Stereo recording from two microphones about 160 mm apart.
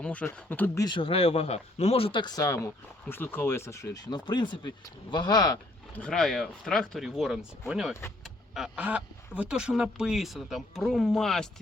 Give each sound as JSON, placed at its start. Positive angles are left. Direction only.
{"t": 0.0, "sound": "speech", "side_deg": 10}
{"t": 0.9, "sound": "speech", "side_deg": 30}
{"t": 6.0, "sound": "speech", "side_deg": 5}